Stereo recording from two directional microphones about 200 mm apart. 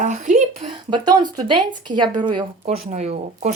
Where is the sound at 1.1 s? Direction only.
25° right (ahead or behind).